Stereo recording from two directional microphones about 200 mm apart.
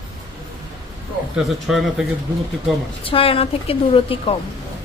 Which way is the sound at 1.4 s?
Centre (ahead or behind).